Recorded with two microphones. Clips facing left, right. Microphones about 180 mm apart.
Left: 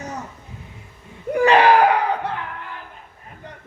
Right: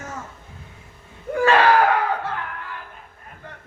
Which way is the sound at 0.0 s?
20° left (ahead or behind).